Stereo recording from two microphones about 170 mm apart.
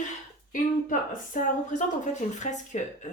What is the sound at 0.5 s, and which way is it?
A woman's voice, 50° left (ahead or behind).